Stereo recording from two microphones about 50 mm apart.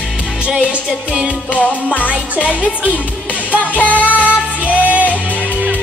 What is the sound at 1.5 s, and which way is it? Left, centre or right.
Music, left.